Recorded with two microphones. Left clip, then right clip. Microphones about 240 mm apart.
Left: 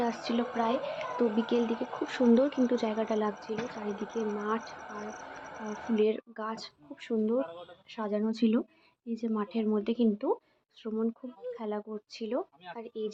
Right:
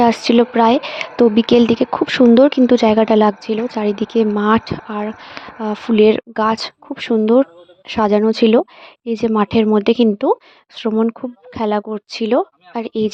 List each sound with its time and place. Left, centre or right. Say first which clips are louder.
0.0 s speech: right 19 dB; right